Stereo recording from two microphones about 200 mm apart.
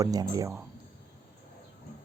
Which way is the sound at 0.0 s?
20° right (ahead or behind).